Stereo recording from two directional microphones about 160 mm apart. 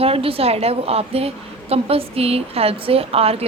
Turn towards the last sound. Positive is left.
turn(degrees=-40)  # may be behind; listen again after turning